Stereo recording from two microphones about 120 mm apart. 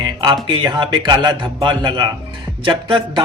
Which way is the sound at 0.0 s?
40° right (ahead or behind).